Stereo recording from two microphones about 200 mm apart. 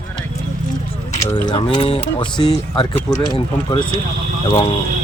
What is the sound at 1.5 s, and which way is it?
Speech, 25° left (ahead or behind).